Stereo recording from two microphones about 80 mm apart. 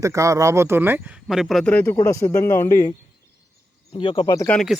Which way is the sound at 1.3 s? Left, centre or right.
Centre.